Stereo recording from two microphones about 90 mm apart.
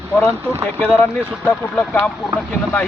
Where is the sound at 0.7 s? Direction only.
25° left (ahead or behind).